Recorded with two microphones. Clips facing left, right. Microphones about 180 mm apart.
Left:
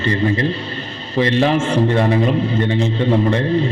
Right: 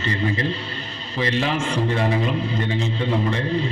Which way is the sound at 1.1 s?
35° left (ahead or behind).